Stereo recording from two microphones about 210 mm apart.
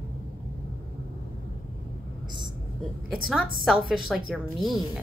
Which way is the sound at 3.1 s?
5° right (ahead or behind).